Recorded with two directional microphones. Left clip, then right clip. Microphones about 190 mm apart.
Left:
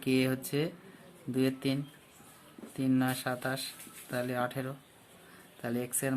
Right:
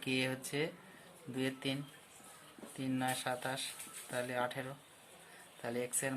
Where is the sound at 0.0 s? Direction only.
30° left (ahead or behind).